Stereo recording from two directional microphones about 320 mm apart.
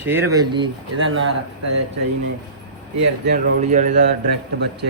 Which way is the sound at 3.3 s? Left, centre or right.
Right.